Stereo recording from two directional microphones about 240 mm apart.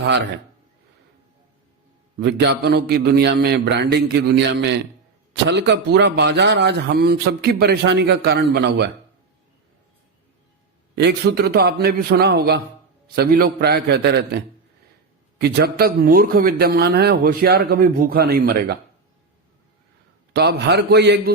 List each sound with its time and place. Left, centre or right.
2.1 s a man's voice: right
10.9 s a man's voice: right
15.4 s a man's voice: right
20.3 s a man's voice: right